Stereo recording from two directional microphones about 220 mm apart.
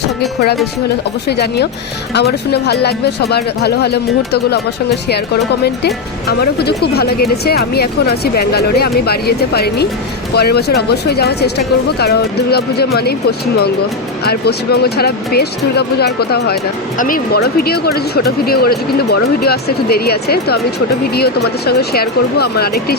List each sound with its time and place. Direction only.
1.3 s speech: 50° left (ahead or behind)
5.6 s speech: 45° left (ahead or behind)
14.3 s speech: 45° left (ahead or behind)